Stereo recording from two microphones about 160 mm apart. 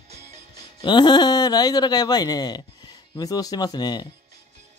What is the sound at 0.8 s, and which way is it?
Speech, 30° left (ahead or behind).